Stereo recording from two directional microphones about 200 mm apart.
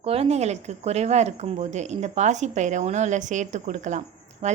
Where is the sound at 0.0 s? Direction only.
30° right (ahead or behind).